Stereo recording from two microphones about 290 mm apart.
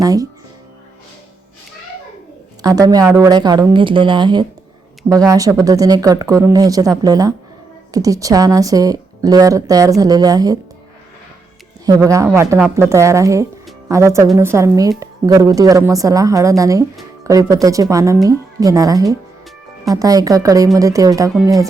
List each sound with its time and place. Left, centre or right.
0.0 s speech: centre
2.6 s speech: centre
11.9 s speech: centre